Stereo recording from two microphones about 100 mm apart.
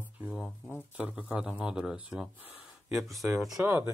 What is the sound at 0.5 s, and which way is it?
Speech, 20° left (ahead or behind).